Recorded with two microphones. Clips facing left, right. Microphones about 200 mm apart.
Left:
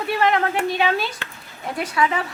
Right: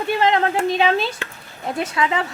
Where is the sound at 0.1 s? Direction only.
20° right (ahead or behind).